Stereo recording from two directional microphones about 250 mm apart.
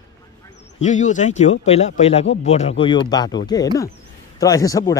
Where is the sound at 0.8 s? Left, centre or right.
Left.